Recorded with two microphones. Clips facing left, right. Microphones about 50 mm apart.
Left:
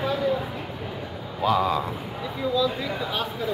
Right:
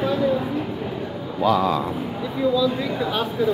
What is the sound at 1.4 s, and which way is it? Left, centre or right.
Speech, centre.